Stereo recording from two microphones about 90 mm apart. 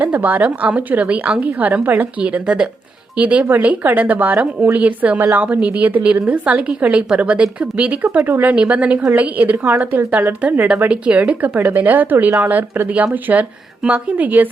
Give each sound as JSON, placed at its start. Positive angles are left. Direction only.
{"t": 0.0, "sound": "a woman's voice", "side_deg": -20}